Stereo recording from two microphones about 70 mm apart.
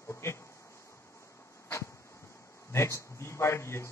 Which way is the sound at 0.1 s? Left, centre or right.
Left.